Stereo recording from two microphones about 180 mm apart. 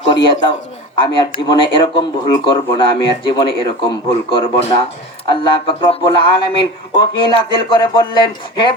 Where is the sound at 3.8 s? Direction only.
25° left (ahead or behind).